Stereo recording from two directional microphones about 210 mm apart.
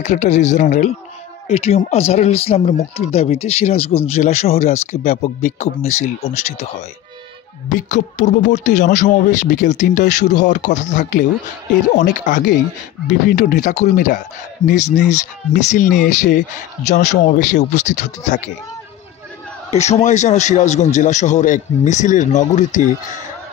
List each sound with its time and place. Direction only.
0.0 s speech: 35° left (ahead or behind)
19.7 s speech: 30° left (ahead or behind)